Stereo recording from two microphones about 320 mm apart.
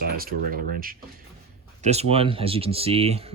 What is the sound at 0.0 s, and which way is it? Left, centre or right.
Speech, right.